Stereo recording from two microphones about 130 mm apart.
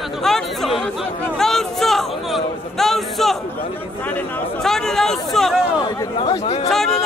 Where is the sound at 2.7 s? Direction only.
Centre (ahead or behind).